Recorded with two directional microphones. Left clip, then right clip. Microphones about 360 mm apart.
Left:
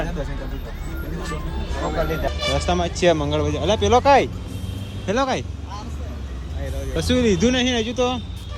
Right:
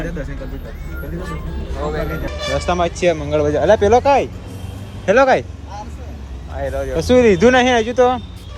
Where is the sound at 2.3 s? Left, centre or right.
Centre.